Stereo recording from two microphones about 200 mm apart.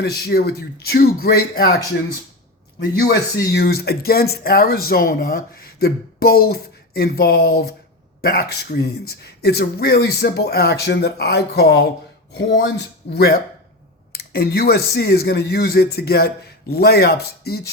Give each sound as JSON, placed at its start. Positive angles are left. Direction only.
{"t": 0.3, "sound": "speech", "side_deg": 55}
{"t": 3.0, "sound": "speech", "side_deg": 50}